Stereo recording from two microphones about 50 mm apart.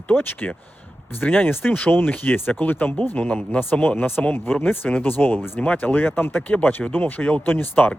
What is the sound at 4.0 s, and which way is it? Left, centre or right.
Speech, left.